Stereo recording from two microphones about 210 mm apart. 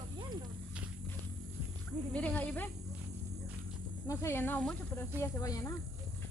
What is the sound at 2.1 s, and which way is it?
Speech, 5° left (ahead or behind).